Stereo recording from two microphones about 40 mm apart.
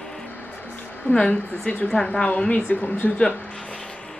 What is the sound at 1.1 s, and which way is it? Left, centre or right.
A woman's voice, left.